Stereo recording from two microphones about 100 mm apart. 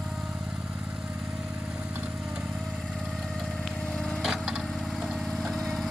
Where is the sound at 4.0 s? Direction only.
Centre (ahead or behind).